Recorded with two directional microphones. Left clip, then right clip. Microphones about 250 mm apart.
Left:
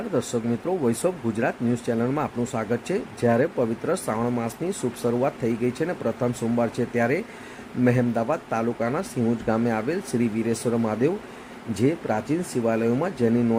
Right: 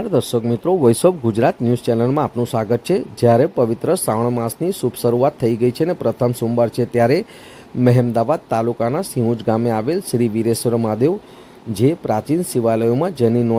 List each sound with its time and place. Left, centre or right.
0.1 s speech: right